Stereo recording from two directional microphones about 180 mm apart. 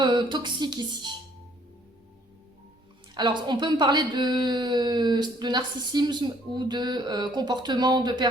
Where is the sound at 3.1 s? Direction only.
25° right (ahead or behind).